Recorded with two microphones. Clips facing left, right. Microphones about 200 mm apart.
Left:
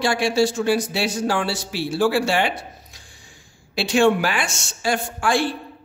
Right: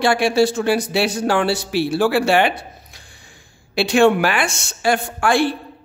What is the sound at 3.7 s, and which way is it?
A woman's voice, 60° right (ahead or behind).